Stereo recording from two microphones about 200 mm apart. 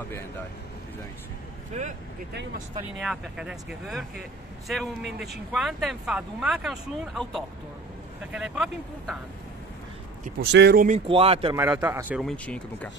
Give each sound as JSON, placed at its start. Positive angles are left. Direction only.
{"t": 1.7, "sound": "speech", "side_deg": -35}
{"t": 3.0, "sound": "speech", "side_deg": 0}
{"t": 10.4, "sound": "speech", "side_deg": -60}
{"t": 10.9, "sound": "speech", "side_deg": -30}
{"t": 11.5, "sound": "a man's voice", "side_deg": -10}
{"t": 12.3, "sound": "speech", "side_deg": 5}